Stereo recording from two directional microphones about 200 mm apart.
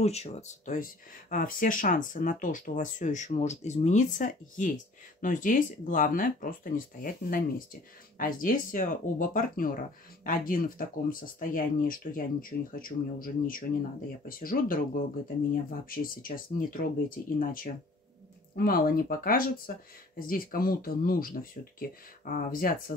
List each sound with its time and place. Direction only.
0.0 s speech: 35° left (ahead or behind)